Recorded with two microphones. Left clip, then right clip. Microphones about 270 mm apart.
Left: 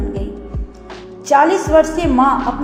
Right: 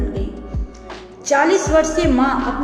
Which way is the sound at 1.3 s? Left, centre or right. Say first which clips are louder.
Left 3 dB; centre.